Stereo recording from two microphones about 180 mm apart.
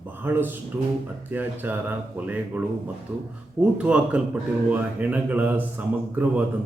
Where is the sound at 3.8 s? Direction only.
5° right (ahead or behind).